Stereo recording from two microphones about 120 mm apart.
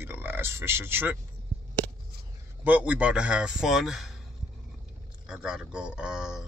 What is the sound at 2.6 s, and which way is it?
A man's voice, 15° right (ahead or behind).